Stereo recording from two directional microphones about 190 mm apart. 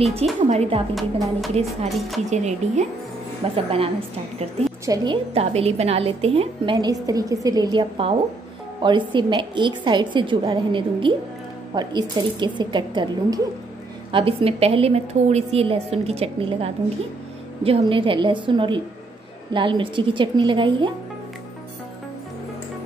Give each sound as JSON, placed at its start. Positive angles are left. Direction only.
{"t": 0.1, "sound": "a woman's voice", "side_deg": -35}
{"t": 0.9, "sound": "speech", "side_deg": 0}
{"t": 1.5, "sound": "a woman's voice", "side_deg": -35}
{"t": 1.9, "sound": "speech", "side_deg": 0}
{"t": 2.3, "sound": "a woman's voice", "side_deg": -35}